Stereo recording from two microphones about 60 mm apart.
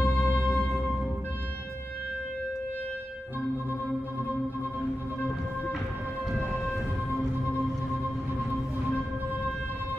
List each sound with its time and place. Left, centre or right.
0.0 s music: left
6.3 s music: centre